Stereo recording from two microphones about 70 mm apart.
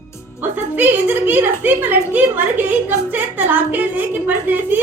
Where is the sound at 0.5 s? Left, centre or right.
Right.